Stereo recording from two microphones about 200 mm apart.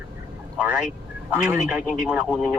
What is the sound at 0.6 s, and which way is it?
Speech, 5° right (ahead or behind).